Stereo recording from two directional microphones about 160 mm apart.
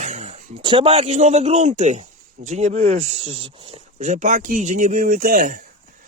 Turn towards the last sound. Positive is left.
turn(degrees=-60)  # may be behind; listen again after turning